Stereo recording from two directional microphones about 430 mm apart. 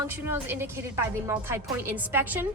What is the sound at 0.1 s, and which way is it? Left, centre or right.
Speech, centre.